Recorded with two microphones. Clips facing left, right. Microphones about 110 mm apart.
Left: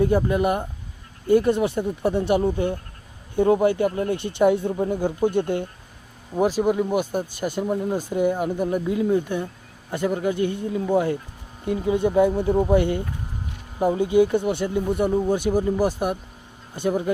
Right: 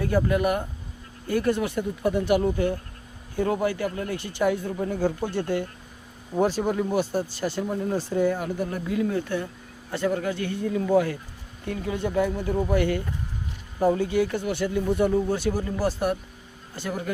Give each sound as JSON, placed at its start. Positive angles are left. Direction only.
{"t": 0.0, "sound": "speech", "side_deg": 25}